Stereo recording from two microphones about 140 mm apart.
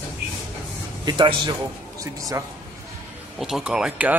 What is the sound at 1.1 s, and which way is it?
A man's voice, 30° right (ahead or behind).